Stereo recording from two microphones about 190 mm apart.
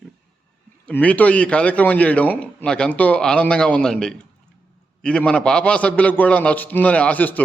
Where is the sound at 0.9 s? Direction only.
5° left (ahead or behind).